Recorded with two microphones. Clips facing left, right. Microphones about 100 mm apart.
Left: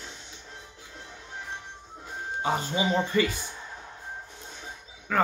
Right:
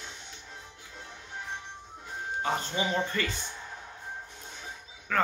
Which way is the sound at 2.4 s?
10° left (ahead or behind).